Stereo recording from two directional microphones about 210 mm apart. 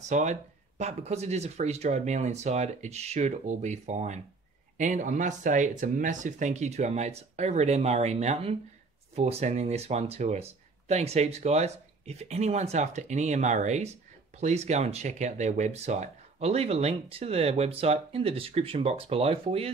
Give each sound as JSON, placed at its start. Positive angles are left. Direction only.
{"t": 0.1, "sound": "speech", "side_deg": -35}